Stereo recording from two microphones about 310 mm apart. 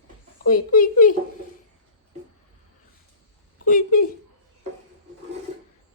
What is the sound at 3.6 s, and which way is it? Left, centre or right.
Speech, left.